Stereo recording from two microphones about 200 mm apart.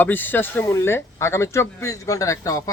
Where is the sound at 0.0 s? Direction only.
10° left (ahead or behind).